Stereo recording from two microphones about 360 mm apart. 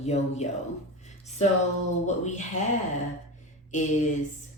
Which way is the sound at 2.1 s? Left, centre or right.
Centre.